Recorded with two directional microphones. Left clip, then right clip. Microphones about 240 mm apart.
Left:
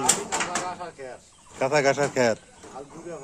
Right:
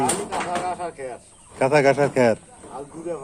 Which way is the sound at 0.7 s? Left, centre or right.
Right.